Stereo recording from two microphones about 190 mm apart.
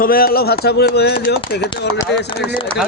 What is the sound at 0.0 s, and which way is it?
Speech, 50° left (ahead or behind).